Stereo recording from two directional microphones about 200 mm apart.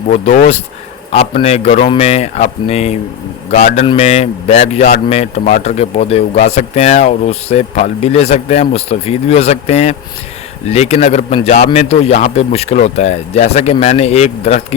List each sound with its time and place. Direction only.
0.1 s a man's voice: 35° left (ahead or behind)